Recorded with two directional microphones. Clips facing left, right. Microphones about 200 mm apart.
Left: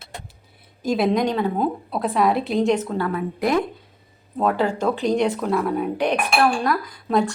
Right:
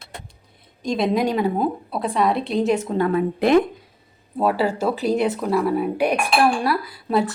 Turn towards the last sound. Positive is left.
turn(degrees=-5)  # may be behind; listen again after turning